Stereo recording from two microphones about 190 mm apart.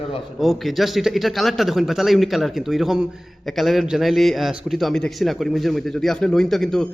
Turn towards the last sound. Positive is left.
turn(degrees=0)  # may be behind; listen again after turning